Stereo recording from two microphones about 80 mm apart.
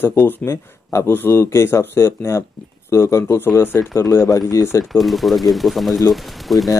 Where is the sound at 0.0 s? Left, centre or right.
Left.